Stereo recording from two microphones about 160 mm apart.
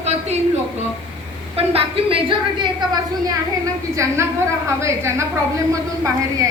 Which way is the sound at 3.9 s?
20° right (ahead or behind).